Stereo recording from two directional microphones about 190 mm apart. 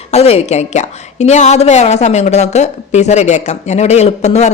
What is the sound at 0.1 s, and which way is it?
A woman's voice, 35° left (ahead or behind).